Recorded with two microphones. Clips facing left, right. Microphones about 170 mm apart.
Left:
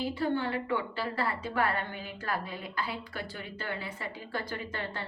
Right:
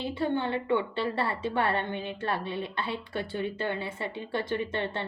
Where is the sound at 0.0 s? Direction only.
25° right (ahead or behind).